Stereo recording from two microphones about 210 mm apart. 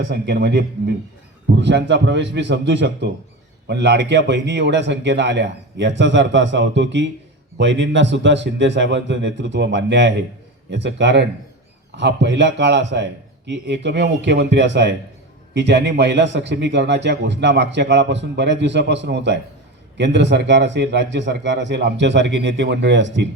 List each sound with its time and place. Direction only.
0.1 s a man's voice: 50° right (ahead or behind)